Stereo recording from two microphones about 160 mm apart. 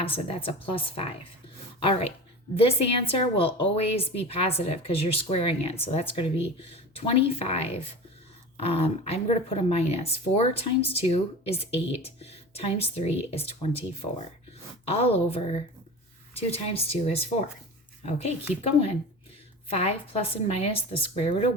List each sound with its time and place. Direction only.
0.0 s speech: 35° left (ahead or behind)
19.7 s speech: 40° left (ahead or behind)